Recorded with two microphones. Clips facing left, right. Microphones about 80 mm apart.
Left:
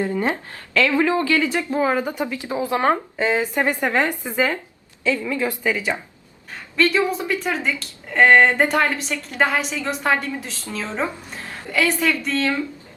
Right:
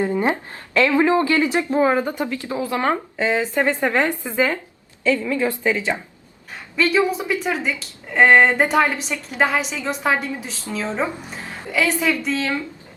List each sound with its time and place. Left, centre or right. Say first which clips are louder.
0.0 s speech: right 2 dB; right
2.0 s a woman's voice: right 1 dB; centre
6.7 s a woman's voice: right 1 dB; centre